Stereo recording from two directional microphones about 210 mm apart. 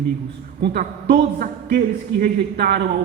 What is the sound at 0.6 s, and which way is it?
Speech, 50° right (ahead or behind).